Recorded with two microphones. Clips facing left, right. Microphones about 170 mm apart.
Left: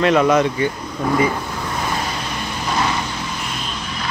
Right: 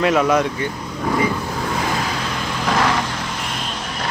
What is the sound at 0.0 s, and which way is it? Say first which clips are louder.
Speech: left 2 dB; 5° right (ahead or behind).